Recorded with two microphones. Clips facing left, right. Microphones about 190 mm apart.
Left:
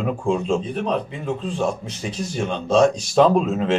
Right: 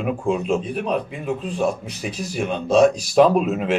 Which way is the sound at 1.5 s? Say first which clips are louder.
Right 2 dB; 25° left (ahead or behind).